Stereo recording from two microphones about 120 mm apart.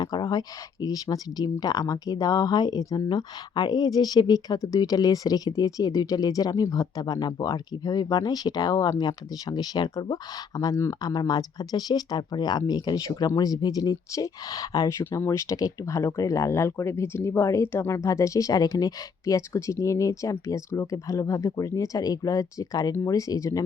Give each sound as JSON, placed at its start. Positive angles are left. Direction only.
{"t": 0.0, "sound": "speech", "side_deg": 35}